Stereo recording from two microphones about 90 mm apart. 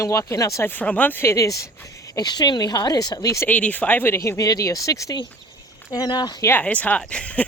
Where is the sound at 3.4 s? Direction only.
20° left (ahead or behind); by 6.3 s 50° left (ahead or behind).